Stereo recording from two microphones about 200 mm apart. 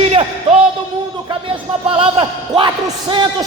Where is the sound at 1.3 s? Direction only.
25° right (ahead or behind).